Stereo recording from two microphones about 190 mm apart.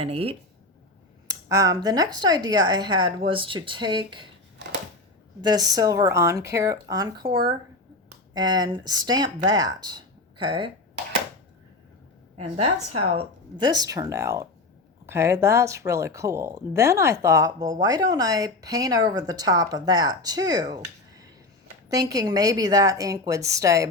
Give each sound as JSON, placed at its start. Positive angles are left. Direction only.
{"t": 0.0, "sound": "speech", "side_deg": -30}
{"t": 1.5, "sound": "speech", "side_deg": -20}
{"t": 5.4, "sound": "speech", "side_deg": -20}
{"t": 12.4, "sound": "speech", "side_deg": -35}